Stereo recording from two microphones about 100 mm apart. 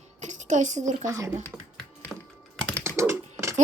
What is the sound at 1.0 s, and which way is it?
Speech, 30° right (ahead or behind).